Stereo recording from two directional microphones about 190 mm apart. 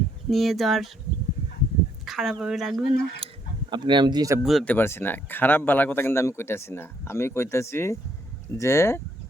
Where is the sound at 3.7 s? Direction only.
25° right (ahead or behind).